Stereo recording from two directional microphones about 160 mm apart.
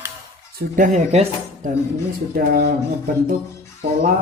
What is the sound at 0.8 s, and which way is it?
Speech, 50° right (ahead or behind).